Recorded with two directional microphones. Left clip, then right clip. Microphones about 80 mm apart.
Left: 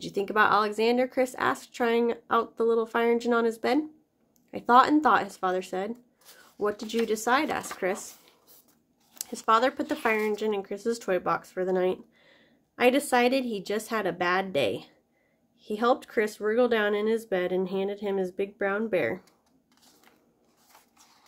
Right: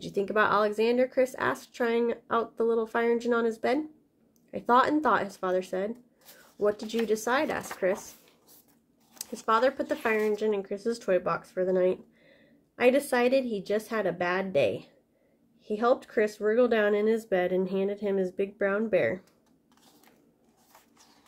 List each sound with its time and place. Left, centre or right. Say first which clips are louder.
0.0 s speech: left 2 dB; left
9.2 s speech: left 2 dB; left